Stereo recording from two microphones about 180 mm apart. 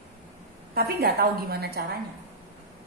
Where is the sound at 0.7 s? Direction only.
60° right (ahead or behind).